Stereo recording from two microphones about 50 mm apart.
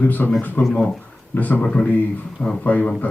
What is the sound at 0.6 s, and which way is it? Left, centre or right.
Speech, centre.